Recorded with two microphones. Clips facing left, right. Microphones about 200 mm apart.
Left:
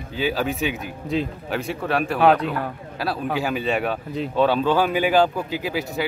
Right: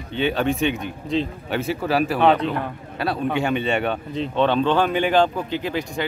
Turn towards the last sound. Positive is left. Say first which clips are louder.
# even
turn(degrees=5)  # may be behind; listen again after turning